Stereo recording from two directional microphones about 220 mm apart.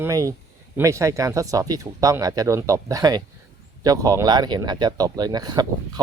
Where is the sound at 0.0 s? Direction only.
15° right (ahead or behind).